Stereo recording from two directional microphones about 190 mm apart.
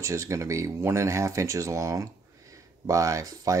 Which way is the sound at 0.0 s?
15° right (ahead or behind).